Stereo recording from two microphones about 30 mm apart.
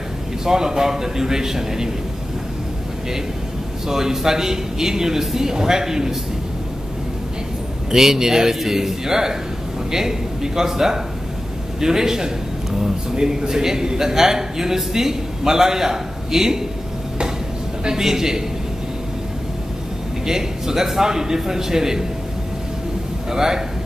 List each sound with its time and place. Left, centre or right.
0.5 s a man's voice: centre
3.8 s a man's voice: centre
7.9 s a man's voice: centre
17.8 s a man's voice: centre
20.2 s a man's voice: centre
23.3 s a man's voice: centre